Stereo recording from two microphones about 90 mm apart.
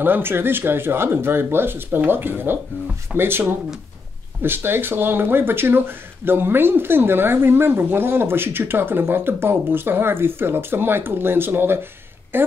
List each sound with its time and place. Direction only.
0.0 s speech: 25° right (ahead or behind)